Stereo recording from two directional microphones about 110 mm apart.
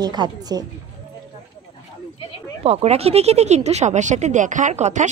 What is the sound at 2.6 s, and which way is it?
Speech, 70° right (ahead or behind).